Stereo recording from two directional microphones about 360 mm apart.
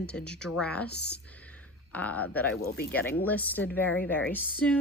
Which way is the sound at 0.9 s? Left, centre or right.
Left.